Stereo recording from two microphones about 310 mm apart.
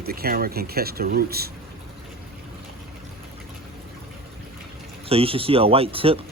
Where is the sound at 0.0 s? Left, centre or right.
Right.